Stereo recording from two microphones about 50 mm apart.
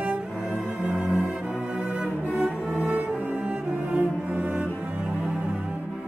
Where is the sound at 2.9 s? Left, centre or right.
Right.